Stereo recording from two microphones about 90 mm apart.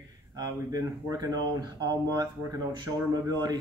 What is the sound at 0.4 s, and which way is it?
Speech, 40° right (ahead or behind).